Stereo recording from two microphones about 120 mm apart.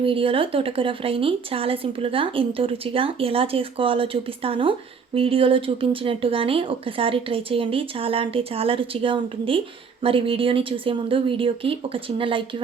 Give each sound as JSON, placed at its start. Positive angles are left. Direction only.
{"t": 0.0, "sound": "speech", "side_deg": -50}